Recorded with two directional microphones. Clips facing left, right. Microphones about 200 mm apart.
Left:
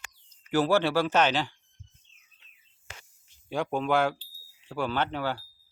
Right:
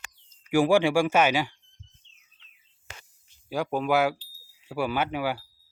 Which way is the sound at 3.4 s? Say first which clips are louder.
Right 1 dB; 5° right (ahead or behind).